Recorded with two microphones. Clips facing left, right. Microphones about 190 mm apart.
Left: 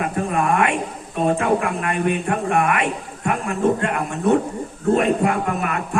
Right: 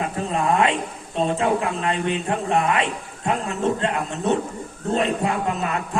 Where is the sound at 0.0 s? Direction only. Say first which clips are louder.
Left 2 dB; 25° right (ahead or behind).